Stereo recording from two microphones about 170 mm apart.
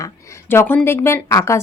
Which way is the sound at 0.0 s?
15° left (ahead or behind).